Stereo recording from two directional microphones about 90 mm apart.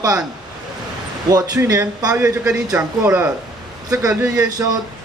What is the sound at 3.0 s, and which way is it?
Speech, 35° right (ahead or behind).